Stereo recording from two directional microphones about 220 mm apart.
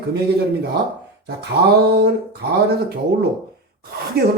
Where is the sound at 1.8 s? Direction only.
50° right (ahead or behind).